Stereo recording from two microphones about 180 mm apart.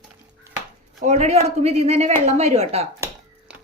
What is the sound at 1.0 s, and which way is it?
A woman's voice, 40° right (ahead or behind).